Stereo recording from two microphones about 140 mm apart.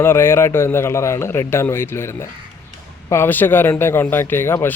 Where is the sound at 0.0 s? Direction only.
15° left (ahead or behind).